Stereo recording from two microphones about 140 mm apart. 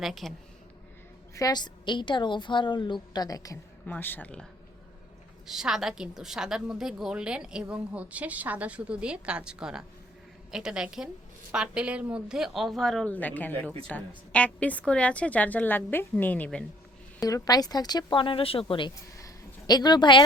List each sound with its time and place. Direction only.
0.0 s a woman's voice: centre (ahead or behind)
1.4 s a woman's voice: 30° left (ahead or behind)
3.8 s a woman's voice: 15° left (ahead or behind)
5.5 s a woman's voice: 5° right (ahead or behind)
17.2 s a woman's voice: 25° left (ahead or behind)
19.1 s a sound: 25° left (ahead or behind)